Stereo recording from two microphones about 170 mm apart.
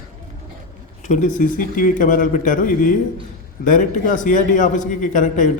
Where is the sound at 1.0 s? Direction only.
45° left (ahead or behind).